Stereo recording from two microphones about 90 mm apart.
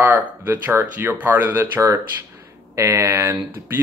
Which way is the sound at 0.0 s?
20° right (ahead or behind).